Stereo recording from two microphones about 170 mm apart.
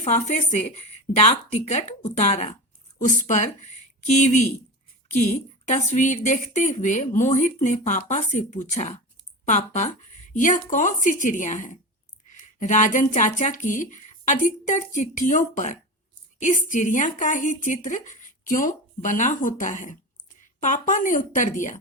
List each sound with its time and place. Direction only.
0.0 s a woman's voice: 40° left (ahead or behind)